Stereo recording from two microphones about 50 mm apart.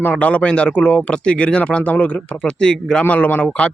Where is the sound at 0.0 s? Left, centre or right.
Left.